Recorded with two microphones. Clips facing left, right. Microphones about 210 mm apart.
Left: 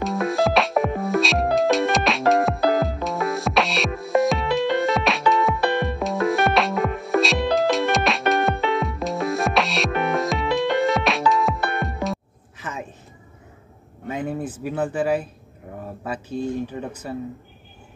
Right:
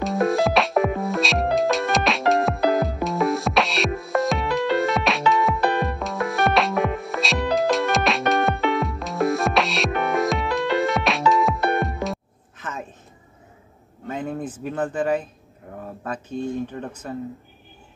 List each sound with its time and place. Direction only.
0.0 s music: centre (ahead or behind)
14.0 s a sound: 10° left (ahead or behind)
16.7 s speech: 10° left (ahead or behind)